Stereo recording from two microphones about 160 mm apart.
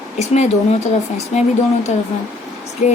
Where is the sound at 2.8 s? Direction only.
45° left (ahead or behind).